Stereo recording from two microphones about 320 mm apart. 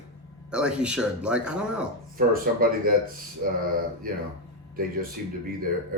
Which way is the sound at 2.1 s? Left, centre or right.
Right.